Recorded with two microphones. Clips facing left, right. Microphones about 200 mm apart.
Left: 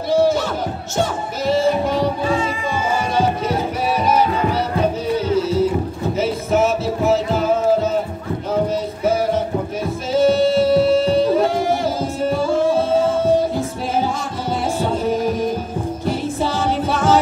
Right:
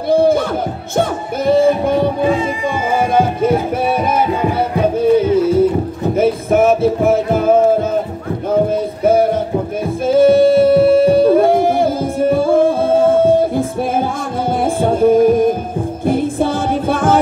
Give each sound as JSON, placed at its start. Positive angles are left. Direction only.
{"t": 0.1, "sound": "music", "side_deg": -55}